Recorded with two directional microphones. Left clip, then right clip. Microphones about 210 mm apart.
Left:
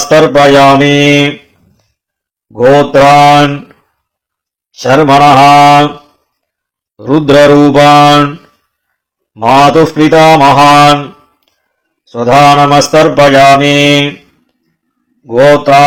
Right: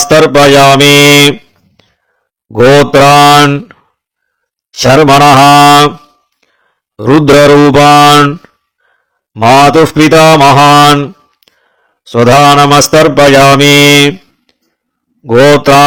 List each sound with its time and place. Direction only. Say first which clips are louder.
0.0 s speech: right 1 dB; 40° right (ahead or behind)
2.5 s mantra: right 1 dB; 45° right (ahead or behind)
4.7 s speech: right 2 dB; 40° right (ahead or behind)
6.9 s speech: right 2 dB; 35° right (ahead or behind)
10.3 s mantra: even; 50° right (ahead or behind)
12.0 s mantra: right 1 dB; 45° right (ahead or behind)
13.8 s a sound: right 4 dB; 35° right (ahead or behind)
15.3 s speech: right 1 dB; 40° right (ahead or behind)